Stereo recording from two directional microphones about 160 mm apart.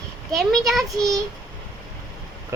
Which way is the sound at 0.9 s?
20° right (ahead or behind).